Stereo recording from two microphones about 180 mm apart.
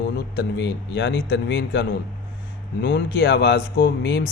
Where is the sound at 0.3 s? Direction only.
65° left (ahead or behind).